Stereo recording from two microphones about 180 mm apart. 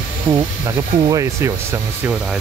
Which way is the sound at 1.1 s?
20° right (ahead or behind).